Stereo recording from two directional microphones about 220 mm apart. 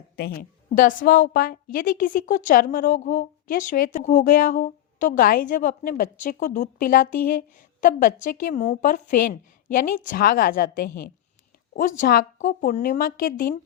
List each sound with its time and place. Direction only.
0.2 s a woman's voice: 45° left (ahead or behind)